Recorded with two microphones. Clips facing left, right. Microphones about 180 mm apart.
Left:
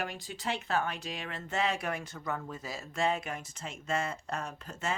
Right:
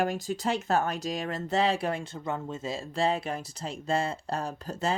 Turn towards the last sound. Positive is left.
turn(degrees=-35)  # may be behind; listen again after turning